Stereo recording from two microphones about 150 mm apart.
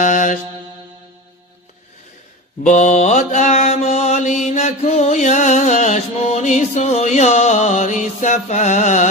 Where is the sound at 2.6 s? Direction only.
55° left (ahead or behind).